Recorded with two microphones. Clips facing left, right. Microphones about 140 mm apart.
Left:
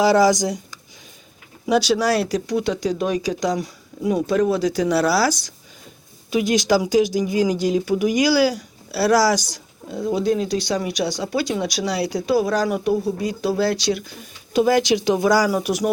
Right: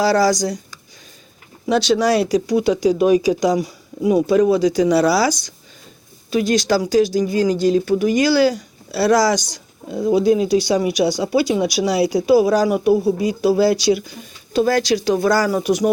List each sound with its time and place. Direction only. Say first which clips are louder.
0.0 s speech: even; 20° left (ahead or behind)
1.6 s speech: right 2 dB; 10° left (ahead or behind)
6.3 s speech: right 1 dB; 15° left (ahead or behind); by 14.3 s 5° right (ahead or behind)
14.5 s speech: even; 15° left (ahead or behind)